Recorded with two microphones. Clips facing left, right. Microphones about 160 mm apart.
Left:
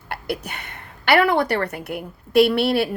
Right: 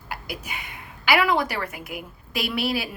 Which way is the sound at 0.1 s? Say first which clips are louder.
Left 6 dB; 65° left (ahead or behind).